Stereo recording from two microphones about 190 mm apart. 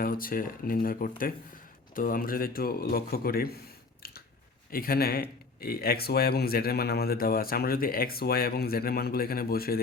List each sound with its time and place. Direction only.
0.0 s speech: 50° left (ahead or behind)
4.0 s biting: 55° left (ahead or behind)
4.7 s speech: 50° left (ahead or behind)